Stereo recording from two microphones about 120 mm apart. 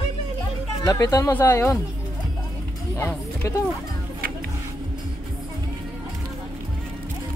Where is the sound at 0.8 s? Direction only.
30° left (ahead or behind).